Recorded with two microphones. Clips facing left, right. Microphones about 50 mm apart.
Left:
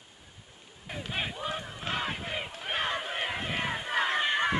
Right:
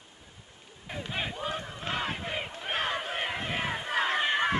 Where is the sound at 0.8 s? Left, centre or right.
Centre.